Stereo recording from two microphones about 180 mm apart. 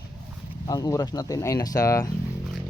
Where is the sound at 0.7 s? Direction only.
20° left (ahead or behind).